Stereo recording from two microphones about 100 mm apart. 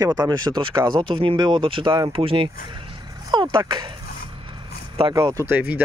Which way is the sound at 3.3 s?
50° right (ahead or behind).